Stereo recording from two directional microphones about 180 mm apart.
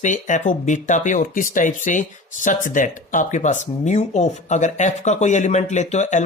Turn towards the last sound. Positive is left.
turn(degrees=40)  # may be behind; listen again after turning